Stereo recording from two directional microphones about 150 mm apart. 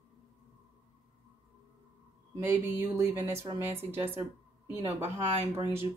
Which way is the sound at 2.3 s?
15° right (ahead or behind).